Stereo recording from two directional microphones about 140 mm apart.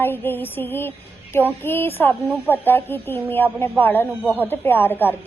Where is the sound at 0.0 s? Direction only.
15° left (ahead or behind).